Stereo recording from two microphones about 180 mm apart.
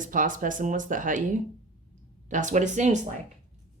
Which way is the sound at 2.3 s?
45° right (ahead or behind).